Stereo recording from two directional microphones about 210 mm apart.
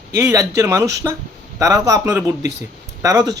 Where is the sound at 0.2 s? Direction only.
15° right (ahead or behind).